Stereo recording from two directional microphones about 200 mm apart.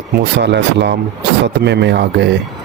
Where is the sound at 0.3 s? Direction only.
60° right (ahead or behind).